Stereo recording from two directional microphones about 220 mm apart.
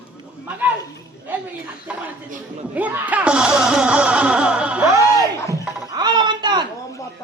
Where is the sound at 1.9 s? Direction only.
5° right (ahead or behind).